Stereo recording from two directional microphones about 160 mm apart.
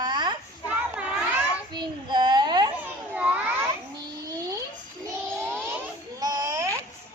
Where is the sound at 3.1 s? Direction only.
10° right (ahead or behind).